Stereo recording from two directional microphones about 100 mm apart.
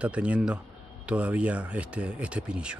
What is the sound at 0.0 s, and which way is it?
A man's voice, 10° right (ahead or behind).